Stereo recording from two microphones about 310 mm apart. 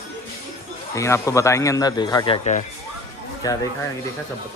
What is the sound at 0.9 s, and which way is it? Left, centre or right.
Speech, centre.